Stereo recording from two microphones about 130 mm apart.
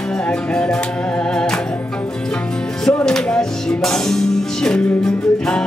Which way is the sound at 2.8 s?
5° left (ahead or behind).